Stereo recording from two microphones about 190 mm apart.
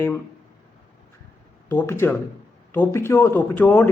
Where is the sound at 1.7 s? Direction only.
10° left (ahead or behind).